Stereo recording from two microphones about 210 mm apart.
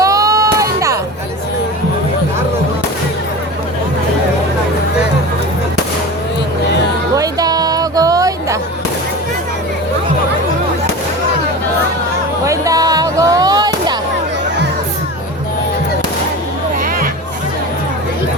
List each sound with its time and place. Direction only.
0.0 s a sound: 15° right (ahead or behind)
7.2 s music: 20° right (ahead or behind)
12.5 s music: 15° right (ahead or behind)